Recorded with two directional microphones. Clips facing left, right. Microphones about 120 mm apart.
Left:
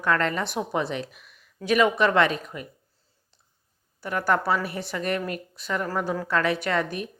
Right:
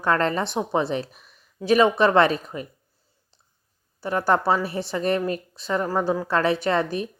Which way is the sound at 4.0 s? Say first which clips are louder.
Right 3 dB; 30° right (ahead or behind).